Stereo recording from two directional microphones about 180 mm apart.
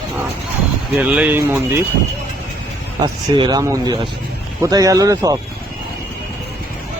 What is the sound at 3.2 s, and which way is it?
Speech, 25° right (ahead or behind).